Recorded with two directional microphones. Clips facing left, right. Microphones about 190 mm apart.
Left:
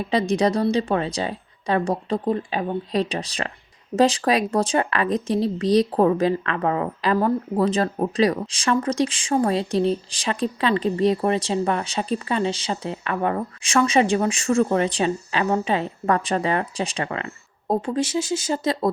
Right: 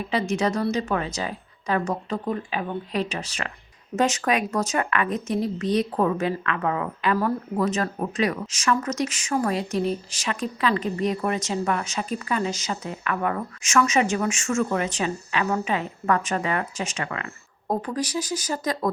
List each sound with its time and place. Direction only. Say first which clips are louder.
0.0 s speech: left 4 dB; 35° left (ahead or behind)